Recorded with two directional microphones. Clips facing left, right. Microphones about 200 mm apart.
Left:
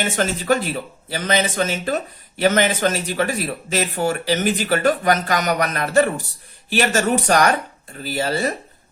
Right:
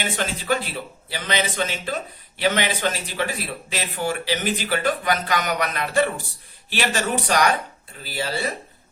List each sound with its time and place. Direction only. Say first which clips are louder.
0.0 s speech: left 5 dB; 45° left (ahead or behind)